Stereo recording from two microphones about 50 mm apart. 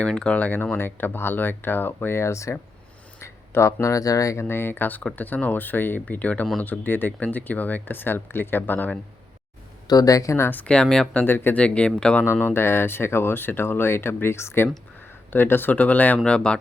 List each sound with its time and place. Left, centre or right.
0.0 s speech: left
0.4 s speech: left
2.2 s speech: left
3.2 s speech: left
4.4 s speech: left
10.2 s speech: left
10.7 s speech: centre
11.3 s speech: left
11.5 s speech: left
12.4 s speech: left
15.3 s speech: left
16.2 s speech: left